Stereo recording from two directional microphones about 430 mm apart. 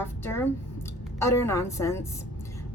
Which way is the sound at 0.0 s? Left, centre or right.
Centre.